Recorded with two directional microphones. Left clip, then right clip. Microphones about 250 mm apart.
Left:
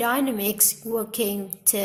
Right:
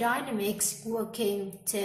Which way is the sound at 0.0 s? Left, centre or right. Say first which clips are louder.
Left 5 dB; left.